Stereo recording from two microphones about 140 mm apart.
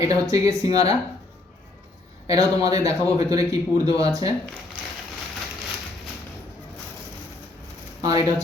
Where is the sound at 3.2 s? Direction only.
25° right (ahead or behind).